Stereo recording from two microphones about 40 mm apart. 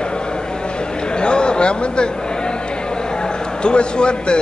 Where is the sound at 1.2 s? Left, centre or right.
Left.